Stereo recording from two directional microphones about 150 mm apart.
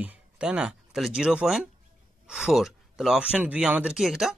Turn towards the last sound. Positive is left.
turn(degrees=0)  # may be behind; listen again after turning